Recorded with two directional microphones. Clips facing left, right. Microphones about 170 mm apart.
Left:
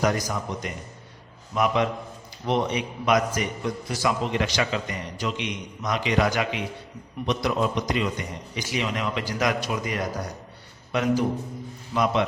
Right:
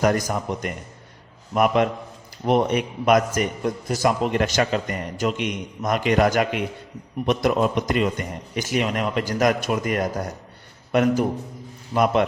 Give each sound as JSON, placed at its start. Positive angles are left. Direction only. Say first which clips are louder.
{"t": 0.0, "sound": "a man's voice", "louder": "right 4 dB", "side_deg": -50}